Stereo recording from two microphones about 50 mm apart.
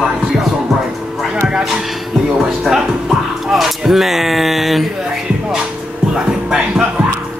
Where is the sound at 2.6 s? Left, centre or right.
Centre.